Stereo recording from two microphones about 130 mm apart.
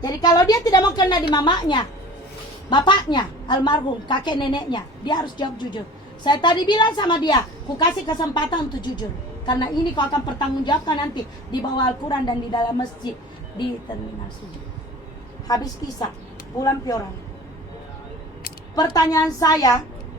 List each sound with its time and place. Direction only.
0.0 s a woman's voice: 30° left (ahead or behind)
15.4 s a woman's voice: 30° left (ahead or behind)
18.8 s a woman's voice: 30° left (ahead or behind)